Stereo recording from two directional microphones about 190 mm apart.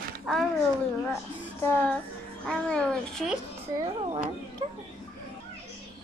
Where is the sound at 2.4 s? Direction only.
5° left (ahead or behind).